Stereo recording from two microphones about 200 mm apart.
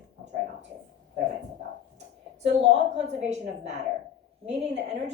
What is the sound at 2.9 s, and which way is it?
A woman's voice, 35° right (ahead or behind).